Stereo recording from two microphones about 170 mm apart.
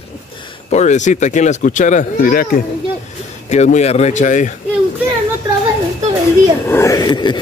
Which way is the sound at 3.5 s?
40° left (ahead or behind).